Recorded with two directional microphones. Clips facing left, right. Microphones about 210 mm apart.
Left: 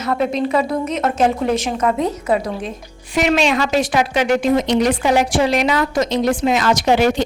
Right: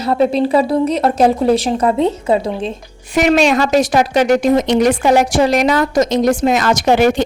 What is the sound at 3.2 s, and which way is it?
A woman's voice, 45° right (ahead or behind).